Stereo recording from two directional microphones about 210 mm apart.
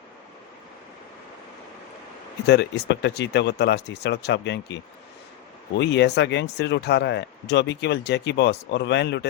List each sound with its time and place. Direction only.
2.5 s speech: 55° left (ahead or behind)